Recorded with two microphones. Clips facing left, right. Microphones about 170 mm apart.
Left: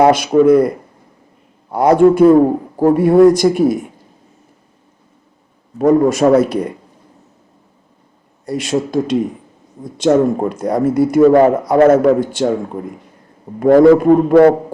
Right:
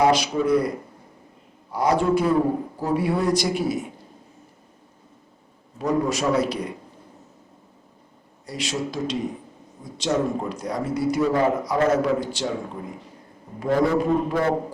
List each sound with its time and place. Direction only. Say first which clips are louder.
0.0 s speech: left 10 dB; 55° left (ahead or behind)
1.7 s speech: left 10 dB; 55° left (ahead or behind)
5.8 s speech: left 11 dB; 50° left (ahead or behind)
8.4 s speech: left 10 dB; 50° left (ahead or behind)
13.6 s a man's voice: left 13 dB; 55° left (ahead or behind)